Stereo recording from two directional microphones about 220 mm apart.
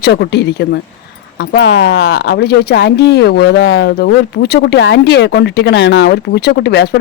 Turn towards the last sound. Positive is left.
turn(degrees=50)  # may be behind; listen again after turning